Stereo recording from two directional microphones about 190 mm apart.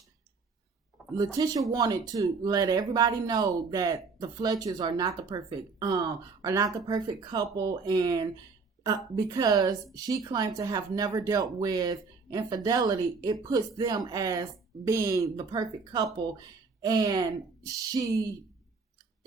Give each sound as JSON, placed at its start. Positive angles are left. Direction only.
{"t": 1.1, "sound": "speech", "side_deg": -20}